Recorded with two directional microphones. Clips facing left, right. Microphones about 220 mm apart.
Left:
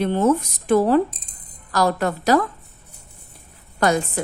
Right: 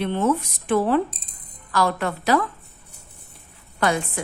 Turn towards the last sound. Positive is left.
turn(degrees=40)  # may be behind; listen again after turning